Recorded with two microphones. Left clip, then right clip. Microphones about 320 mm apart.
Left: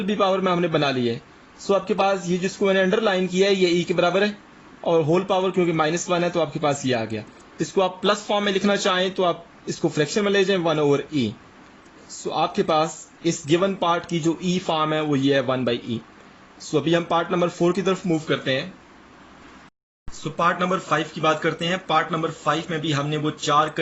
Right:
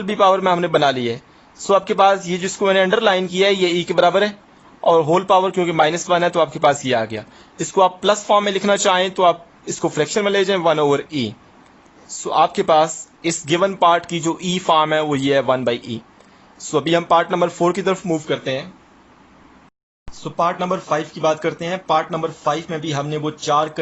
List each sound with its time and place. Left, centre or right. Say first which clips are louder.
0.0 s a man's voice: right 6 dB; right
20.3 s speech: right 2 dB; centre